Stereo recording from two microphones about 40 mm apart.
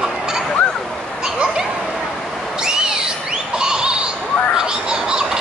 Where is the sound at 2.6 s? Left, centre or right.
Centre.